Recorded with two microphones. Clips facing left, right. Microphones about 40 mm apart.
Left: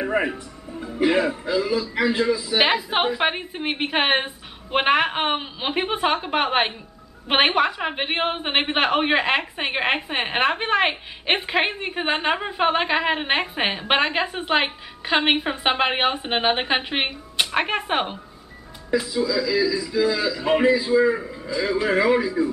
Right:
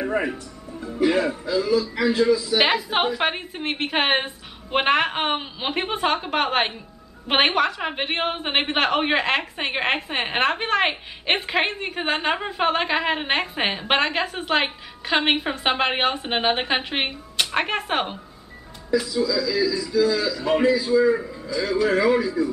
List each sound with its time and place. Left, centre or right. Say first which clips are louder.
0.0 s a man's voice: left 1 dB; centre
2.6 s a woman's voice: even; centre
18.9 s a man's voice: even; centre